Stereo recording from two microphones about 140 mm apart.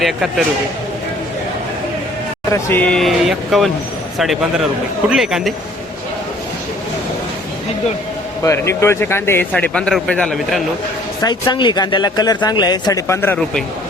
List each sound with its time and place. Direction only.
0.0 s speech: 5° right (ahead or behind)
2.5 s speech: 15° left (ahead or behind); by 5.5 s 5° right (ahead or behind)
8.4 s speech: 20° left (ahead or behind)
11.2 s speech: 30° left (ahead or behind)
13.2 s speech: 10° left (ahead or behind)